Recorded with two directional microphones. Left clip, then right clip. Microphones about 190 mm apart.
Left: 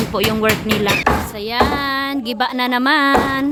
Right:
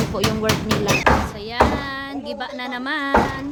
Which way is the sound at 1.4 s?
45° left (ahead or behind).